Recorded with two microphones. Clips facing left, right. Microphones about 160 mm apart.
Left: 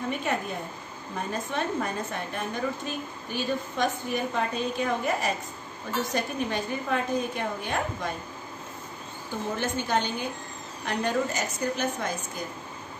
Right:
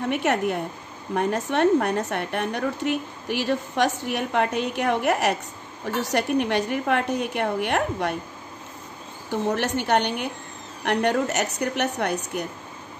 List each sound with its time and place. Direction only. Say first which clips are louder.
0.1 s a woman's voice: right 9 dB; 75° right (ahead or behind)
9.3 s a woman's voice: right 6 dB; 75° right (ahead or behind)